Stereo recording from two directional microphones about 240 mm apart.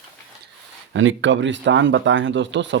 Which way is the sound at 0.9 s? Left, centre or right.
Right.